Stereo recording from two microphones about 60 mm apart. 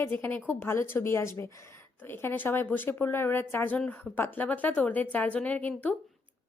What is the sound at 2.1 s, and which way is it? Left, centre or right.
A woman's voice, left.